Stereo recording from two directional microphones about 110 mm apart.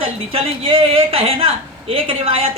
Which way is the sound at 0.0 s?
60° right (ahead or behind).